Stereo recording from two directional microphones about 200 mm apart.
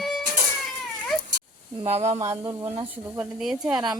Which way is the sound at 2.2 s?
15° right (ahead or behind).